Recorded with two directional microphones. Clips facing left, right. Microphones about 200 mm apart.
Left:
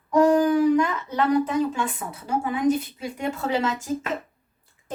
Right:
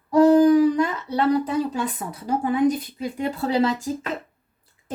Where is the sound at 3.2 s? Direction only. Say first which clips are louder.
Right 3 dB; 35° right (ahead or behind).